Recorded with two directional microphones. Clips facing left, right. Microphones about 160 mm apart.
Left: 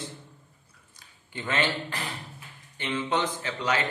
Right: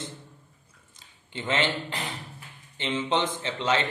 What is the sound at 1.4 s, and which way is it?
A man's voice, 20° right (ahead or behind).